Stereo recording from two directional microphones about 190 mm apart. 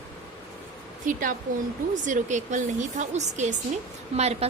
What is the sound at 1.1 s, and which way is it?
A woman's voice, 45° right (ahead or behind).